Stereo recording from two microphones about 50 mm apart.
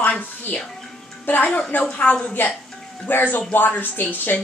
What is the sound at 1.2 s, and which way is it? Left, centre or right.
Speech, left.